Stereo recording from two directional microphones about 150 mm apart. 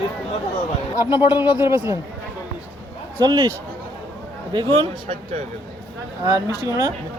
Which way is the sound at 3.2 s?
30° right (ahead or behind).